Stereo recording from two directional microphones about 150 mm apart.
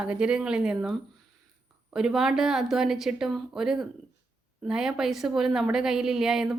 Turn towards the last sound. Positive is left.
turn(degrees=-5)  # may be behind; listen again after turning